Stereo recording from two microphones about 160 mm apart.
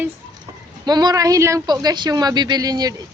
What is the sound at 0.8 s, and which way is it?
Speech, 25° right (ahead or behind).